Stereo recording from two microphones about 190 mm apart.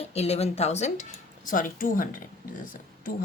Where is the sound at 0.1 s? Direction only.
35° left (ahead or behind).